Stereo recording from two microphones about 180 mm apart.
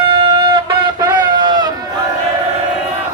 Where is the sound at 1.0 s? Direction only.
25° right (ahead or behind).